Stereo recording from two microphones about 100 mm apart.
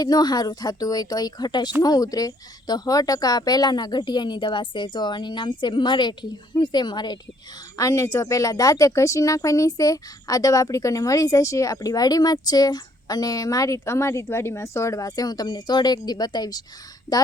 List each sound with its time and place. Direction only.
0.0 s speech: 40° left (ahead or behind)
7.8 s speech: 30° left (ahead or behind)